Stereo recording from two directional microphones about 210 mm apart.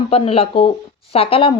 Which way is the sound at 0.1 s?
25° left (ahead or behind).